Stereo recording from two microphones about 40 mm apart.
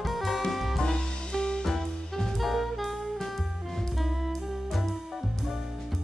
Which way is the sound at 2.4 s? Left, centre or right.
Centre.